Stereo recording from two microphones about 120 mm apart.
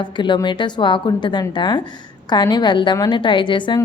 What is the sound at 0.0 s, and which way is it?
A woman's voice, 40° left (ahead or behind).